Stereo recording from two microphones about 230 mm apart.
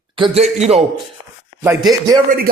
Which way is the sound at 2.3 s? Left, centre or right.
Right.